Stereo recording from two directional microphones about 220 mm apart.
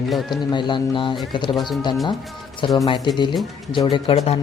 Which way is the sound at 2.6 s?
20° left (ahead or behind).